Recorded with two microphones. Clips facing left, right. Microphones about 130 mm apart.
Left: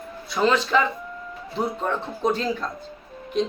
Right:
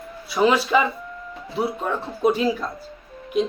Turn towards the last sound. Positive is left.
turn(degrees=-5)  # may be behind; listen again after turning